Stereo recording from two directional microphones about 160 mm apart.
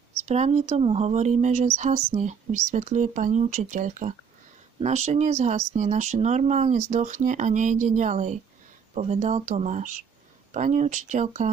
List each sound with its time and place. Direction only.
0.2 s speech: 45° right (ahead or behind)